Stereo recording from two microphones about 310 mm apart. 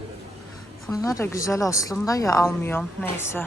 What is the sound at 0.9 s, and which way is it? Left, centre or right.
Speech, centre.